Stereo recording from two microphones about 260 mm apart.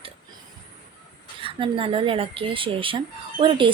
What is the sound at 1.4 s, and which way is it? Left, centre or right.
A woman's voice, right.